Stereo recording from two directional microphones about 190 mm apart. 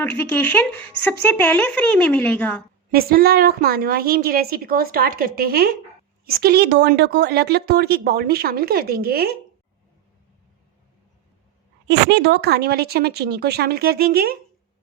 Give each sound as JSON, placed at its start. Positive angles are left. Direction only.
{"t": 0.0, "sound": "speech", "side_deg": 10}
{"t": 2.9, "sound": "a woman's voice", "side_deg": -55}
{"t": 11.9, "sound": "a woman's voice", "side_deg": -60}